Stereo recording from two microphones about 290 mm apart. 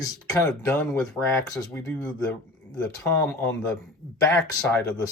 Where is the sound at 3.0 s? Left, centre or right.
Centre.